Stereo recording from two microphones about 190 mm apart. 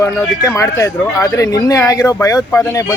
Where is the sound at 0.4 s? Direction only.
15° left (ahead or behind).